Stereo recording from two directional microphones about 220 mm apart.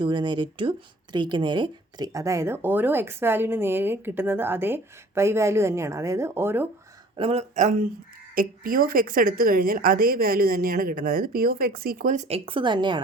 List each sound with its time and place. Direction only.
0.0 s speech: 20° right (ahead or behind)
7.2 s speech: 25° right (ahead or behind)